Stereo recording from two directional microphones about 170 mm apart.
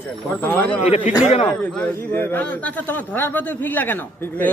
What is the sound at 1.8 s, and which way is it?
A man's voice, 10° left (ahead or behind).